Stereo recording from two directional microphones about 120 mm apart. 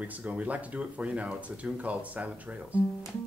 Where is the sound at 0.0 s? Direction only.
10° right (ahead or behind).